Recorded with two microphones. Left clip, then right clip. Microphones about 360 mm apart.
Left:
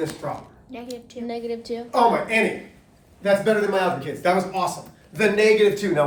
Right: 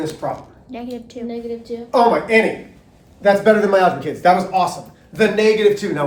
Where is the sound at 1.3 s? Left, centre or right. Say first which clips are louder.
Right 1 dB; left.